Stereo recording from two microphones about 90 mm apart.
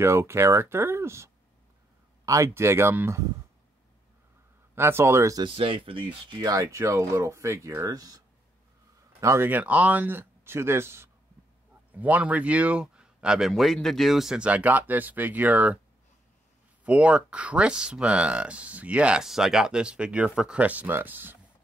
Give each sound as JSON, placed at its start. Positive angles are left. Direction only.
{"t": 0.0, "sound": "speech", "side_deg": -30}
{"t": 4.7, "sound": "speech", "side_deg": -30}
{"t": 5.6, "sound": "speech", "side_deg": -80}
{"t": 6.4, "sound": "speech", "side_deg": -35}
{"t": 9.2, "sound": "speech", "side_deg": -30}
{"t": 9.5, "sound": "speech", "side_deg": -15}
{"t": 11.9, "sound": "speech", "side_deg": -15}
{"t": 16.8, "sound": "speech", "side_deg": -15}